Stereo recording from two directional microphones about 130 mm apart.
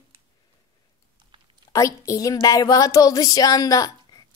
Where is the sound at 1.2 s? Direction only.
35° right (ahead or behind).